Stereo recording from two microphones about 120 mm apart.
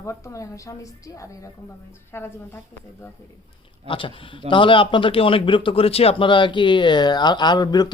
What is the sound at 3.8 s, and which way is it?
A man's voice, 45° left (ahead or behind).